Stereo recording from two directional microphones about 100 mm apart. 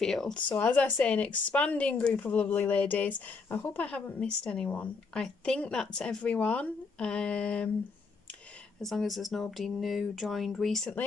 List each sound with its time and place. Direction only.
0.0 s speech: 5° left (ahead or behind)
0.5 s speech: 15° left (ahead or behind)
8.8 s speech: centre (ahead or behind)